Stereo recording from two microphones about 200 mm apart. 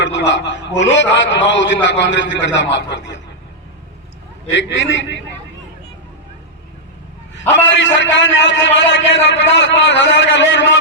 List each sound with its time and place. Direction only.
0.0 s a man's voice: 65° left (ahead or behind)
4.5 s a man's voice: 65° left (ahead or behind)
7.6 s a man's voice: 65° left (ahead or behind)